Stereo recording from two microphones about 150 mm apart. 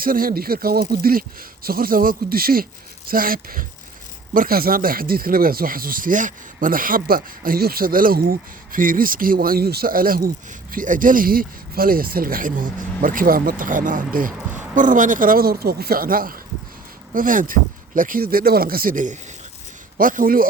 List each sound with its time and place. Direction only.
0.0 s speech: 70° right (ahead or behind)